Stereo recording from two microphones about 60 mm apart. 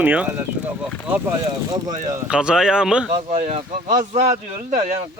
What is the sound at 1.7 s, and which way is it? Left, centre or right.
Speech, right.